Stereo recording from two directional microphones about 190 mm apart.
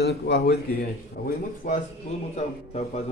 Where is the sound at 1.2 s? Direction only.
50° left (ahead or behind).